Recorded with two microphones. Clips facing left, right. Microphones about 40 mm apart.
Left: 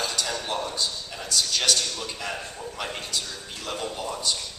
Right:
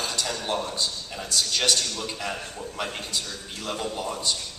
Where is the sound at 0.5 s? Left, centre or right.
Centre.